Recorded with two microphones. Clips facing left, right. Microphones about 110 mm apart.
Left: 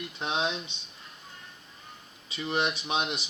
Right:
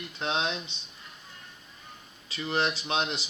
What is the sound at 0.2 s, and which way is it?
Speech, 10° left (ahead or behind).